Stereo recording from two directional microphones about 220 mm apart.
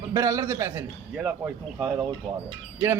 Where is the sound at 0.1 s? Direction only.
15° right (ahead or behind).